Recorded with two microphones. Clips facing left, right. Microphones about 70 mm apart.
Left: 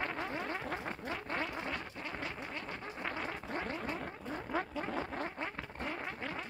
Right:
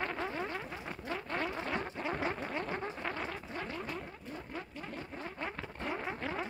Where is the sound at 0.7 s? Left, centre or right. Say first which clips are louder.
Left 3 dB; left.